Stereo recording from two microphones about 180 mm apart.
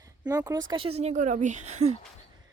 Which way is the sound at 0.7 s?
30° right (ahead or behind).